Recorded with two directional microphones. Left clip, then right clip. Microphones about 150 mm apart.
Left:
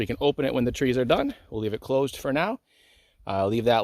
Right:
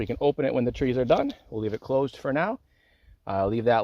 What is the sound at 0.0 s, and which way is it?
Speech, 30° left (ahead or behind).